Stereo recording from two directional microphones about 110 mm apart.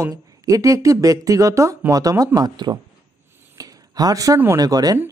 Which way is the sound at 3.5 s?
35° right (ahead or behind).